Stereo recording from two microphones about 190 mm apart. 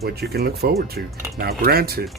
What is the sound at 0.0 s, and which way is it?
Speech, 55° right (ahead or behind).